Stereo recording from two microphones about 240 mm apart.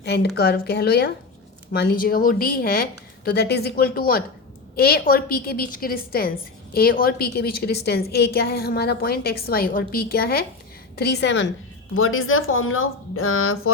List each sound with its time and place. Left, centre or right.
0.0 s a woman's voice: left
11.9 s speech: left